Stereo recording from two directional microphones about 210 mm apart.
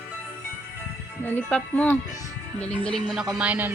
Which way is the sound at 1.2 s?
10° left (ahead or behind).